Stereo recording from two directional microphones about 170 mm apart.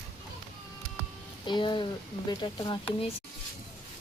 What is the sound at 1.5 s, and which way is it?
Speech, 25° left (ahead or behind).